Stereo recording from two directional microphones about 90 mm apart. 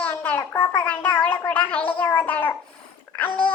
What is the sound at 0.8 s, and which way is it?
Music, 20° left (ahead or behind).